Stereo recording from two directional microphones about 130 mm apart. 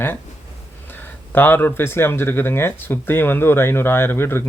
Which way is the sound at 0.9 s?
15° left (ahead or behind).